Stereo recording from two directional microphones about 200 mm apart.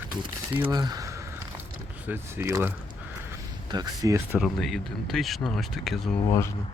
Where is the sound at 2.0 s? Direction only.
10° right (ahead or behind).